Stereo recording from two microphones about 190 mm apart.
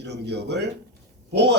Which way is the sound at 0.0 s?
65° right (ahead or behind).